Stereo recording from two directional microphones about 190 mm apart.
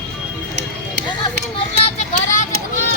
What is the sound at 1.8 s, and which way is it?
Vehicle, 40° left (ahead or behind).